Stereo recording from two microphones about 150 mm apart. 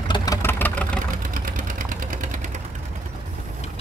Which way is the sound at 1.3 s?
65° right (ahead or behind).